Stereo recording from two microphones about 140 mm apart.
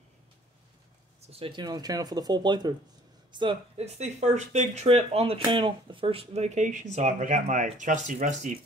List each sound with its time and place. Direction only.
1.3 s speech: 35° right (ahead or behind)
3.7 s speech: 50° right (ahead or behind)